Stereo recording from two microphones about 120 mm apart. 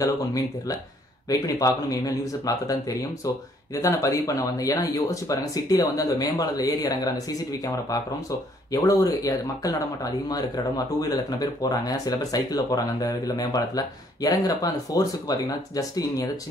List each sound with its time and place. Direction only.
0.0 s speech: 30° left (ahead or behind)